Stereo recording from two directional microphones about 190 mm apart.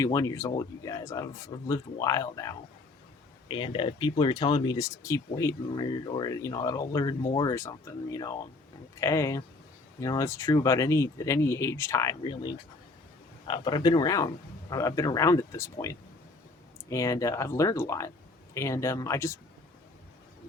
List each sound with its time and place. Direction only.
0.0 s speech: 15° left (ahead or behind)